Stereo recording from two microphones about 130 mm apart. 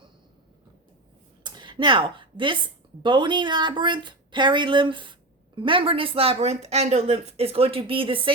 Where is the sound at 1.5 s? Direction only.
35° right (ahead or behind).